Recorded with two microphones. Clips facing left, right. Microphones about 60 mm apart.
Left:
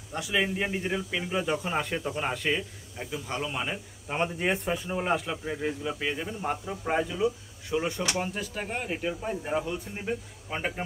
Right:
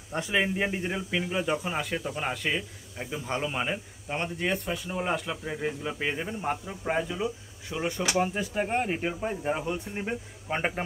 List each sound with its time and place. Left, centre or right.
0.2 s speech: centre
3.0 s speech: centre
4.1 s speech: centre